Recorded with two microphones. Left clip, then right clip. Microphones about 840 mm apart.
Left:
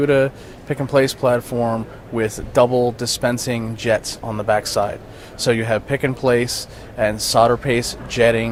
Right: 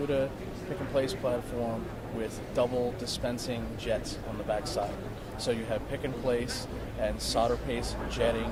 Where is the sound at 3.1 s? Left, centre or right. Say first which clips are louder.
Left 13 dB; left.